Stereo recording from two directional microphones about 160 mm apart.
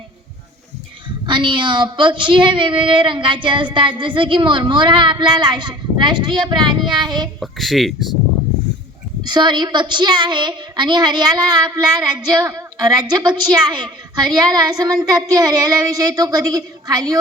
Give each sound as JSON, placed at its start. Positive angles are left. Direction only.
{"t": 1.0, "sound": "a woman's voice", "side_deg": -30}
{"t": 7.3, "sound": "speech", "side_deg": 0}
{"t": 9.2, "sound": "a woman's voice", "side_deg": -25}